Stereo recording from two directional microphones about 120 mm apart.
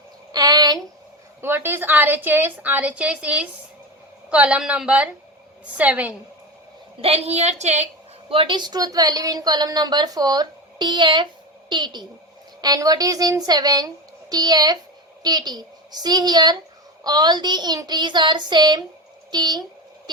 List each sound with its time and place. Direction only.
0.3 s a sound: 35° right (ahead or behind)
1.4 s a woman's voice: 20° right (ahead or behind)
7.0 s a woman's voice: 60° right (ahead or behind)
8.3 s a woman's voice: 45° right (ahead or behind)